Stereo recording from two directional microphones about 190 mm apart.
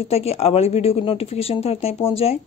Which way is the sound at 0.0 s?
30° left (ahead or behind).